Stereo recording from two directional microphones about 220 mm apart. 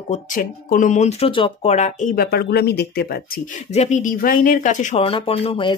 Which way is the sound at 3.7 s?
30° left (ahead or behind).